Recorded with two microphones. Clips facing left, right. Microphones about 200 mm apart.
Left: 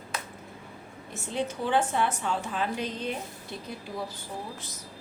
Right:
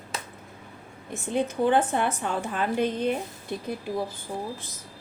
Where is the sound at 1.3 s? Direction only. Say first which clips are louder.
Right 5 dB; 55° right (ahead or behind).